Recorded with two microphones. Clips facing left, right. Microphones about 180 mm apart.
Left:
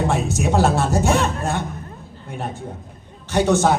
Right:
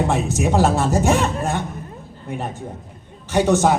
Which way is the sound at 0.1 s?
15° right (ahead or behind).